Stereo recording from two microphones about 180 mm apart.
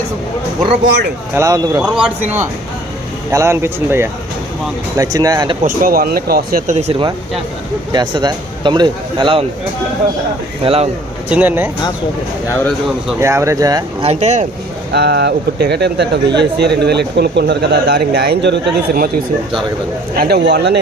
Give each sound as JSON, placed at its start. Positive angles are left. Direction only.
{"t": 1.4, "sound": "speech", "side_deg": -20}
{"t": 1.8, "sound": "speech", "side_deg": -5}
{"t": 5.6, "sound": "speech", "side_deg": -55}
{"t": 6.7, "sound": "speech", "side_deg": -35}
{"t": 7.9, "sound": "speech", "side_deg": -25}
{"t": 10.6, "sound": "speech", "side_deg": -30}
{"t": 11.3, "sound": "speech", "side_deg": -10}
{"t": 13.1, "sound": "speech", "side_deg": -15}
{"t": 14.0, "sound": "speech", "side_deg": -35}
{"t": 14.9, "sound": "speech", "side_deg": -65}
{"t": 20.1, "sound": "speech", "side_deg": -65}